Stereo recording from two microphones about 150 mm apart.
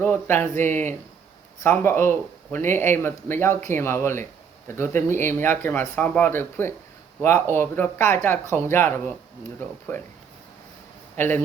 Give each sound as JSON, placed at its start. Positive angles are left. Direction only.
{"t": 0.0, "sound": "speech", "side_deg": 15}
{"t": 11.2, "sound": "speech", "side_deg": 15}